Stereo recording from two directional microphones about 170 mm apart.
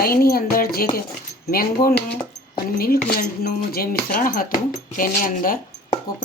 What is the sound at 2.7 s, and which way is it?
Speech, 65° left (ahead or behind).